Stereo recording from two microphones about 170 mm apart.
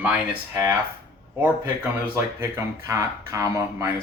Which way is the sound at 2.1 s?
15° right (ahead or behind).